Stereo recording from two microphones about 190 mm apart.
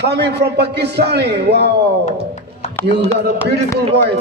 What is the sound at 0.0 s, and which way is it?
A man's voice, 65° right (ahead or behind).